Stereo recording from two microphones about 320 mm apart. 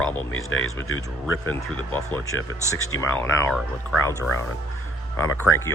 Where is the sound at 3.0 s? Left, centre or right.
Centre.